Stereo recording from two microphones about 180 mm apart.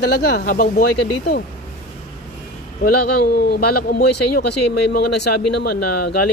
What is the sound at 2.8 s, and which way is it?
Speech, 60° left (ahead or behind).